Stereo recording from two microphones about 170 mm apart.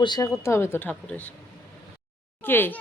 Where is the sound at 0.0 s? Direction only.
25° left (ahead or behind).